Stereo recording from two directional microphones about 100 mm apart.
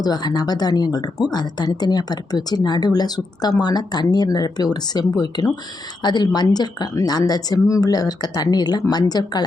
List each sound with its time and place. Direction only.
0.0 s speech: 40° left (ahead or behind)